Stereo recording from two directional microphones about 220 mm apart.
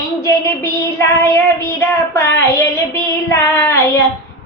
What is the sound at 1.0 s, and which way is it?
Child singing, 10° left (ahead or behind).